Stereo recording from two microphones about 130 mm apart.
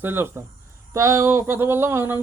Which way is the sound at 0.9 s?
25° right (ahead or behind).